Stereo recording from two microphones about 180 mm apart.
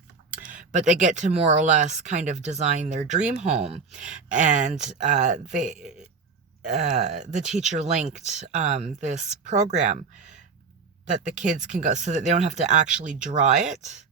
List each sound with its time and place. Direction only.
0.4 s speech: 45° right (ahead or behind)
3.9 s speech: 5° right (ahead or behind)
4.3 s speech: 45° right (ahead or behind)
11.0 s speech: 45° right (ahead or behind)